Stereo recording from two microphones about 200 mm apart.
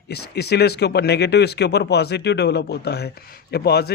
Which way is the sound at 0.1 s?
55° left (ahead or behind).